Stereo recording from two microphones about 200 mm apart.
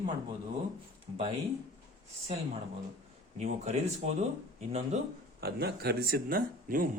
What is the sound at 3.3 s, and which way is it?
Speech, 35° right (ahead or behind).